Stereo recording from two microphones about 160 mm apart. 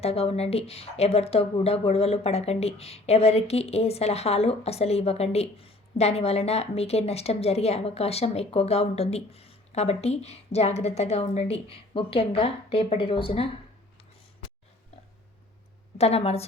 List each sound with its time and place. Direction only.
0.0 s speech: 40° left (ahead or behind)
16.0 s speech: 40° left (ahead or behind)